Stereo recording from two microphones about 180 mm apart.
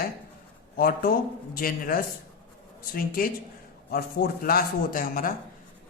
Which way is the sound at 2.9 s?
55° left (ahead or behind).